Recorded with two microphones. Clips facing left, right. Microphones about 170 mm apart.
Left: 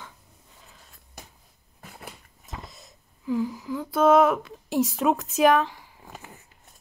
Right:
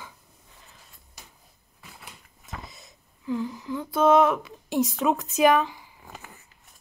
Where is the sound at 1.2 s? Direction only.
55° left (ahead or behind).